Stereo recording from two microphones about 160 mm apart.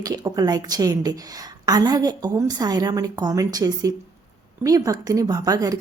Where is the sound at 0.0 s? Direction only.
25° right (ahead or behind).